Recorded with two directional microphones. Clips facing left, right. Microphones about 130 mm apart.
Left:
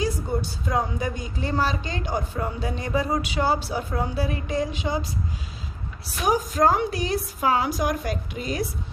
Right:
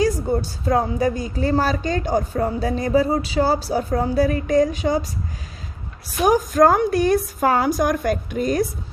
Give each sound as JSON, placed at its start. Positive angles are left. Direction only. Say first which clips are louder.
{"t": 0.7, "sound": "speech", "louder": "right 7 dB", "side_deg": -40}
{"t": 6.2, "sound": "a woman's voice", "louder": "right 6 dB", "side_deg": -50}